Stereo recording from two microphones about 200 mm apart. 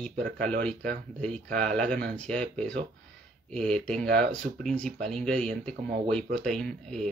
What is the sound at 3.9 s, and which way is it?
Speech, 40° right (ahead or behind).